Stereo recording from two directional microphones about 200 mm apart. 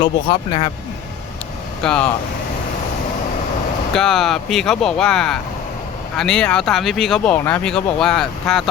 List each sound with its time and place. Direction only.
0.0 s speech: 25° left (ahead or behind)
1.8 s speech: 5° left (ahead or behind)
3.9 s speech: centre (ahead or behind)